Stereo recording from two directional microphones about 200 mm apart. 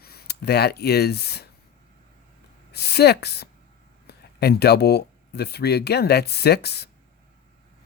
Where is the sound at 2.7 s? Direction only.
55° left (ahead or behind).